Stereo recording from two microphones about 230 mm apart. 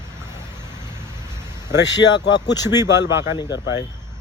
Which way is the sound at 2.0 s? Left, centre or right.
Left.